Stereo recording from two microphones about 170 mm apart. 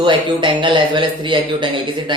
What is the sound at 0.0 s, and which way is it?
Speech, 30° right (ahead or behind).